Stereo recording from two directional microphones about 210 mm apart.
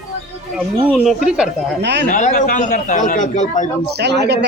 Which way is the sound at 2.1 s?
35° left (ahead or behind).